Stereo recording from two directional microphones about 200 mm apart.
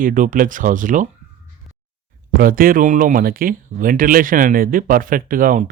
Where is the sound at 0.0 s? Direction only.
40° right (ahead or behind).